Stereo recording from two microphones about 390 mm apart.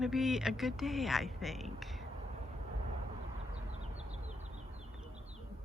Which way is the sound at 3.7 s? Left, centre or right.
Centre.